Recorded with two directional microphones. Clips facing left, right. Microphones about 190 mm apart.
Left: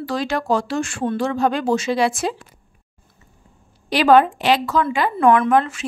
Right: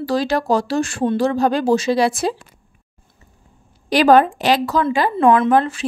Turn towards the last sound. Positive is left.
turn(degrees=-35)  # may be behind; listen again after turning